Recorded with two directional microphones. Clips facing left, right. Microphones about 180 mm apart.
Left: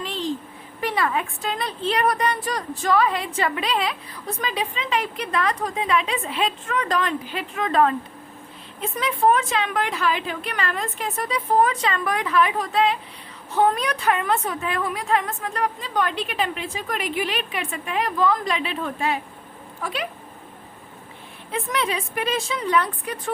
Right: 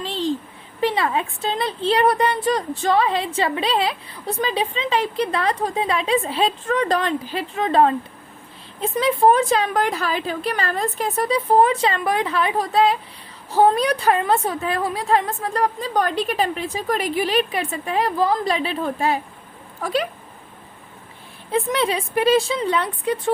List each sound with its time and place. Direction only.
0.0 s a sound: 30° right (ahead or behind)
0.8 s a woman's voice: 25° right (ahead or behind)
21.5 s a woman's voice: 30° right (ahead or behind)